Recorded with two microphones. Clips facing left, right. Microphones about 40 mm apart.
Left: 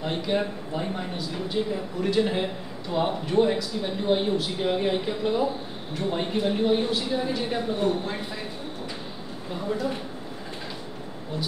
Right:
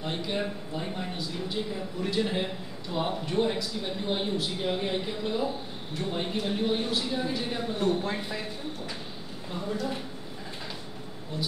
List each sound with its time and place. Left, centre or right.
0.0 s a man's voice: centre
9.7 s a man's voice: centre